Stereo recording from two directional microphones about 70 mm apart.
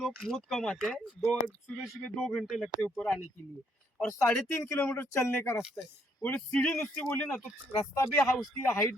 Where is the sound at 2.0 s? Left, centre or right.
Centre.